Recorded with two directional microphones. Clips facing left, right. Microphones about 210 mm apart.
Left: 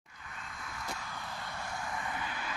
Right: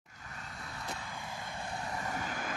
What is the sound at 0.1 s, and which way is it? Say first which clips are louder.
Vehicle: even; 40° right (ahead or behind).